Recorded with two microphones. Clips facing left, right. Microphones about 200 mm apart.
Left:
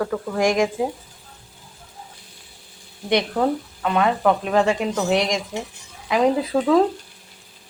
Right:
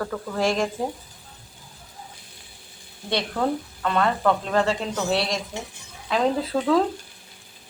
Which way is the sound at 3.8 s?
15° left (ahead or behind).